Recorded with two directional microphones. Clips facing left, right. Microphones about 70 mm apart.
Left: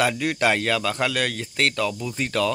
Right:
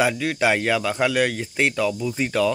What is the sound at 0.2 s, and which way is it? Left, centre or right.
Speech, centre.